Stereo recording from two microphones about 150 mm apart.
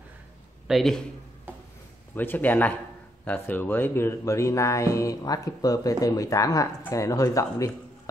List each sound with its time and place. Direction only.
0.7 s a man's voice: centre (ahead or behind)
2.1 s a man's voice: 10° left (ahead or behind)